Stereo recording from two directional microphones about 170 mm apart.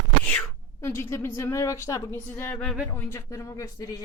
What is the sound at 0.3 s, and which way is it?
Speech, 15° left (ahead or behind).